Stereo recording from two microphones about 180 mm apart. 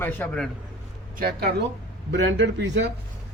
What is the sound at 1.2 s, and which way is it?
Speech, 60° right (ahead or behind).